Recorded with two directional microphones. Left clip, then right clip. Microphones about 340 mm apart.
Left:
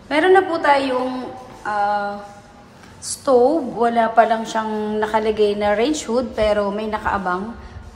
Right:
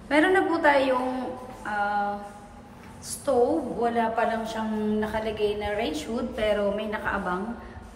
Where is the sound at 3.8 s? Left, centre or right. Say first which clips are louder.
Left 11 dB; centre.